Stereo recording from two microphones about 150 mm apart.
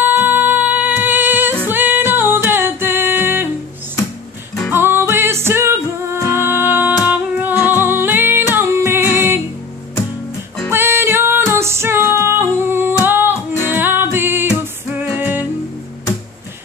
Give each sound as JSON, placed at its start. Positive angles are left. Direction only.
{"t": 0.0, "sound": "music", "side_deg": -15}
{"t": 4.6, "sound": "music", "side_deg": -15}
{"t": 10.7, "sound": "female singing", "side_deg": -15}
{"t": 13.0, "sound": "music", "side_deg": -15}